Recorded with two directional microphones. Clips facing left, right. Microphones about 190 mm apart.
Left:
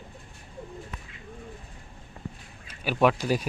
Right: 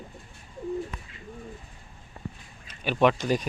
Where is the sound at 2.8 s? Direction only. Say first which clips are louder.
Even; 5° left (ahead or behind).